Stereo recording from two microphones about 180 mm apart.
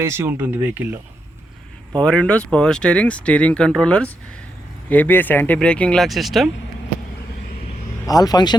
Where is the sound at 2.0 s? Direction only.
5° left (ahead or behind).